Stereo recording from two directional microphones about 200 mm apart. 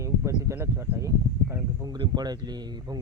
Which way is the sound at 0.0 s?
15° right (ahead or behind).